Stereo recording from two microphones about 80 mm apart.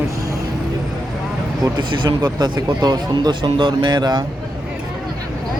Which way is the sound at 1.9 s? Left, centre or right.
Right.